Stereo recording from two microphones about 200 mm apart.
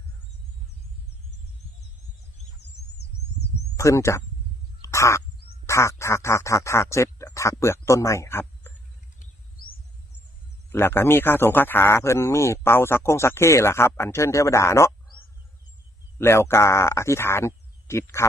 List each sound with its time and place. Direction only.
3.7 s speech: 15° left (ahead or behind)
4.8 s crow: 15° left (ahead or behind)
5.7 s a man's voice: 15° left (ahead or behind)
9.2 s a sound: 45° left (ahead or behind)
10.7 s a man's voice: 10° left (ahead or behind)
16.2 s a man's voice: 10° left (ahead or behind)